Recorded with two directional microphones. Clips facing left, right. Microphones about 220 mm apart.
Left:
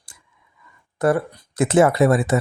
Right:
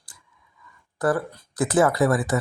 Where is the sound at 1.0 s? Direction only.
25° left (ahead or behind).